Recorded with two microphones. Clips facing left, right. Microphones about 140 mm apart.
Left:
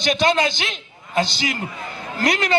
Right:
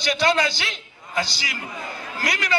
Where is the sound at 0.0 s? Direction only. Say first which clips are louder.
Left 2 dB; 20° left (ahead or behind).